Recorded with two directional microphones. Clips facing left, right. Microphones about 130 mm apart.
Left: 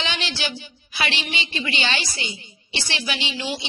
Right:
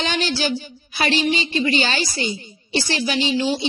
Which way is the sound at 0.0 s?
40° right (ahead or behind).